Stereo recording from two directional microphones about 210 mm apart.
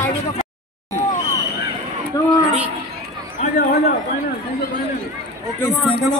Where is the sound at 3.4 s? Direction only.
45° left (ahead or behind).